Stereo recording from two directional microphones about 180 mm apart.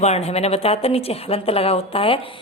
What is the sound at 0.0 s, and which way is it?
A woman's voice, 35° left (ahead or behind).